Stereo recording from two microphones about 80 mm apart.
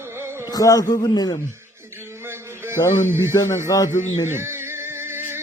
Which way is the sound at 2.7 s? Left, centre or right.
Left.